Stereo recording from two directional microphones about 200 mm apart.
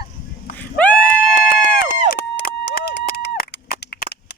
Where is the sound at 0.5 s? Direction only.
10° left (ahead or behind).